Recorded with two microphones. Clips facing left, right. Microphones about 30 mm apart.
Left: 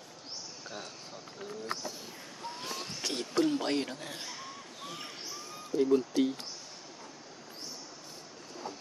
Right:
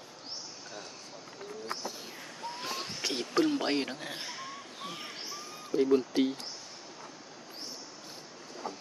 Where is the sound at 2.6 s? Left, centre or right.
Centre.